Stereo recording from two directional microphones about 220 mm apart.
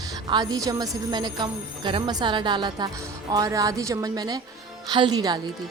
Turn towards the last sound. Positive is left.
turn(degrees=-20)  # may be behind; listen again after turning